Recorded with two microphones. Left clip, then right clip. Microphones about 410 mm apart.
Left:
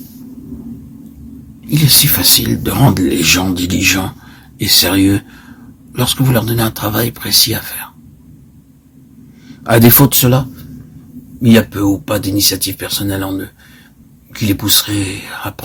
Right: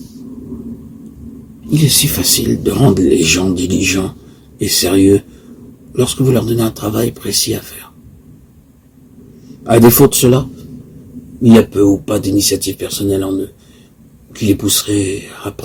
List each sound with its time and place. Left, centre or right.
1.7 s speech: left
9.6 s speech: left
11.7 s speech: left
14.3 s speech: left